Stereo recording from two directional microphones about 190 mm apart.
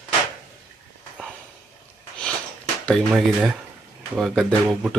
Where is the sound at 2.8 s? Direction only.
Centre (ahead or behind).